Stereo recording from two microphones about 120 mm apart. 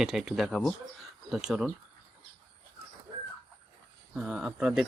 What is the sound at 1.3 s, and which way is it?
Speech, 5° right (ahead or behind).